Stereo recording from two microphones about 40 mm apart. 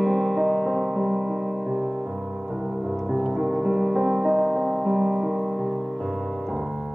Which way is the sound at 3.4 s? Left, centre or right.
Centre.